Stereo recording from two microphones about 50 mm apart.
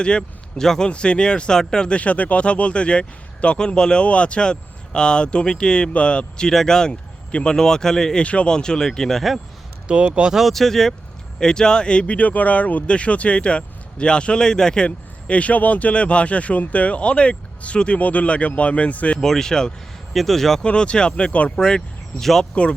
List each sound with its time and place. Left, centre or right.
0.0 s speech: centre
2.0 s speech: left; by 8.2 s centre
8.2 s speech: left; by 9.4 s centre
9.8 s speech: centre
10.4 s speech: centre; by 19.2 s left
19.2 s speech: centre
20.7 s speech: centre
21.5 s speech: centre